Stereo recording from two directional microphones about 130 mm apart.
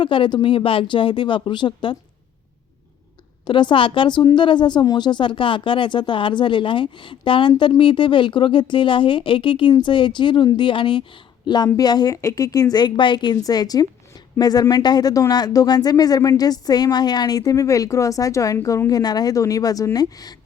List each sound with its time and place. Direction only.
0.0 s speech: 40° left (ahead or behind)
3.4 s speech: 40° left (ahead or behind)